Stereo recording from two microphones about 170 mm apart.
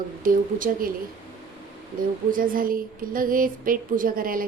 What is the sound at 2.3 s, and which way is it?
A woman's voice, 55° right (ahead or behind).